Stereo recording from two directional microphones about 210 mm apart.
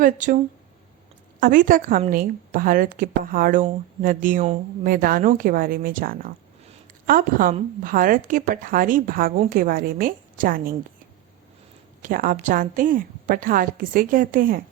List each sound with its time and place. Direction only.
0.0 s a woman's voice: 40° right (ahead or behind)
1.4 s a woman's voice: 40° right (ahead or behind)
12.0 s a woman's voice: 40° right (ahead or behind)